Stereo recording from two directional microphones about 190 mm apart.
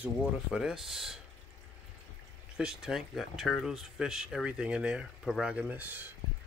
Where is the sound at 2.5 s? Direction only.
5° right (ahead or behind).